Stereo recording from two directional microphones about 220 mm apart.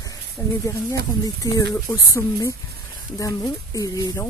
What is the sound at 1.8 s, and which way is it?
Speech, 15° left (ahead or behind).